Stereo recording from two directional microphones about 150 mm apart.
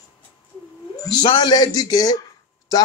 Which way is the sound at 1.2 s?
30° left (ahead or behind).